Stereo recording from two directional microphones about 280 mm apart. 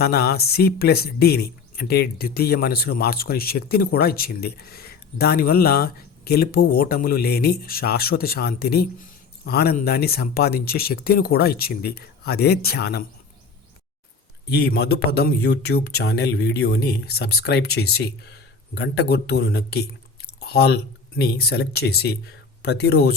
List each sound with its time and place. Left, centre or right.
0.0 s speech: left
14.5 s speech: left